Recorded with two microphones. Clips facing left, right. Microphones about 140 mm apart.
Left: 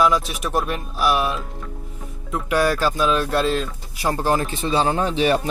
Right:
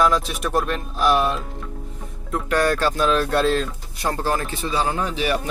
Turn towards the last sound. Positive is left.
turn(degrees=25)  # may be behind; listen again after turning